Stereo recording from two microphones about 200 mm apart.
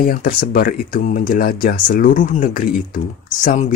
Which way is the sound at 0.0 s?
45° left (ahead or behind).